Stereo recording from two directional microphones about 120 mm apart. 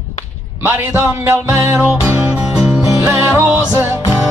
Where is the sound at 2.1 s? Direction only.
30° right (ahead or behind).